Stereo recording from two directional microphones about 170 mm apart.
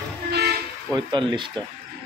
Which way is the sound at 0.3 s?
70° right (ahead or behind).